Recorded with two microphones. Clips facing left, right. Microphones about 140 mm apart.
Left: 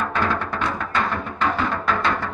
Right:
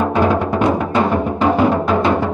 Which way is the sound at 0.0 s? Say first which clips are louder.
Right 8 dB; 15° right (ahead or behind).